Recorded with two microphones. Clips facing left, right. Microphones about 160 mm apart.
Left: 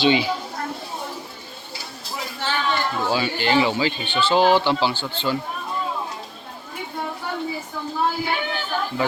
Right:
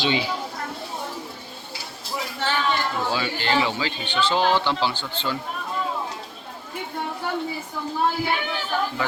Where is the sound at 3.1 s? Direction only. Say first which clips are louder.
Left 5 dB; 10° left (ahead or behind).